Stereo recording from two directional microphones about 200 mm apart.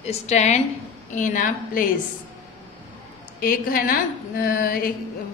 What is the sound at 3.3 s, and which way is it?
A woman's voice, 45° left (ahead or behind).